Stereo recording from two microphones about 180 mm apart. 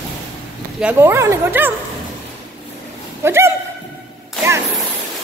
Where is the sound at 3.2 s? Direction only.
15° right (ahead or behind).